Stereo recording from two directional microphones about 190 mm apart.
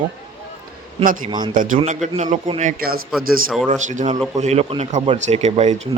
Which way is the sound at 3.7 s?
40° right (ahead or behind).